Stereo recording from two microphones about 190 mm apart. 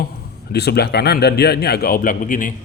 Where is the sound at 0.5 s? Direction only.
60° left (ahead or behind).